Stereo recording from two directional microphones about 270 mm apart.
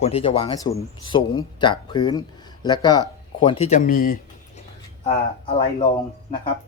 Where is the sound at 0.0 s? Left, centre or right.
Left.